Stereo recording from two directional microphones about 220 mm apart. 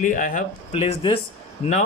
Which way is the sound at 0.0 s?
35° left (ahead or behind).